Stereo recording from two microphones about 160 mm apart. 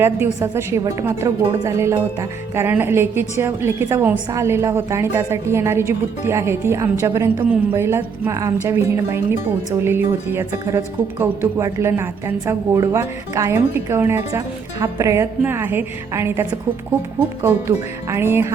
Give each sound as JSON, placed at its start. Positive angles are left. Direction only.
{"t": 0.0, "sound": "speech", "side_deg": -15}